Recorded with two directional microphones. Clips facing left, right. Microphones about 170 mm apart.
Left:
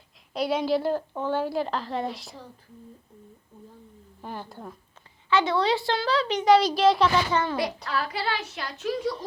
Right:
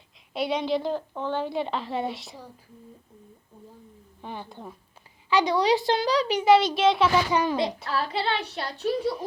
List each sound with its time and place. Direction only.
0.3 s a woman's voice: centre (ahead or behind)
4.2 s a woman's voice: centre (ahead or behind)
5.3 s a woman's voice: 15° right (ahead or behind)
7.3 s a child's voice: 20° right (ahead or behind)
7.9 s a woman's voice: 30° right (ahead or behind)